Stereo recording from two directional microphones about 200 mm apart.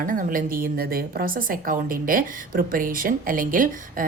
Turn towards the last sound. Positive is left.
turn(degrees=-45)  # may be behind; listen again after turning